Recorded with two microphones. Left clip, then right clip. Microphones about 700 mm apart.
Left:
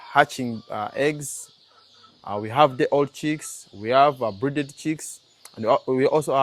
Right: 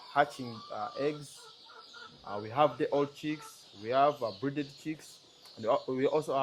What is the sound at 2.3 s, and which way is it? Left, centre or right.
Speech, left.